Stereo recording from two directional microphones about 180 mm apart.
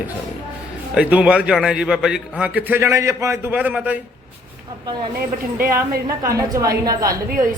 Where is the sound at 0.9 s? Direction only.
5° right (ahead or behind).